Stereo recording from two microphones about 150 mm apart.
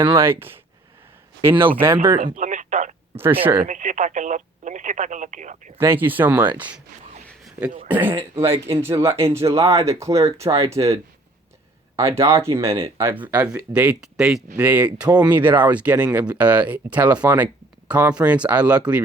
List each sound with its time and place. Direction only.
0.2 s speech: 15° right (ahead or behind)
2.2 s radio: 55° right (ahead or behind)
3.4 s speech: 15° right (ahead or behind)
3.7 s speech: 55° right (ahead or behind)
5.8 s speech: 15° right (ahead or behind)
7.9 s speech: 10° right (ahead or behind)
11.9 s speech: 20° right (ahead or behind)